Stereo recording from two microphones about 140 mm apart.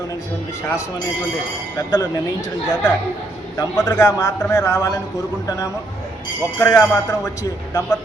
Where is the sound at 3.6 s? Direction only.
25° left (ahead or behind).